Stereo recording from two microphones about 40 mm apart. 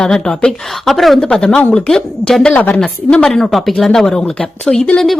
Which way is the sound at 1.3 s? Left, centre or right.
Centre.